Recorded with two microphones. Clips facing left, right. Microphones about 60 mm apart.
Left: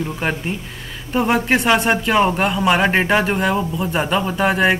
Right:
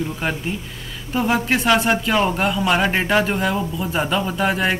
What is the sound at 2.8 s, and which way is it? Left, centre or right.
Speech, centre.